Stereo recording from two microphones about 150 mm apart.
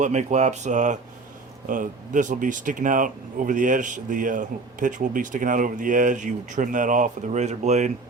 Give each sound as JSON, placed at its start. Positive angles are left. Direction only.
{"t": 0.0, "sound": "speech", "side_deg": -50}